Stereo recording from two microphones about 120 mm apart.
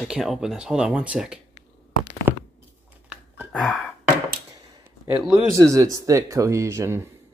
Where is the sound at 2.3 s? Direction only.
15° right (ahead or behind).